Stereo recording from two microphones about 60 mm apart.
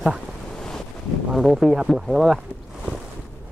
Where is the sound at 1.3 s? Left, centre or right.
Centre.